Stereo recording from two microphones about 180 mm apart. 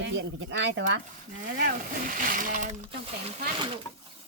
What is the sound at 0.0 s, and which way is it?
Speech, 90° right.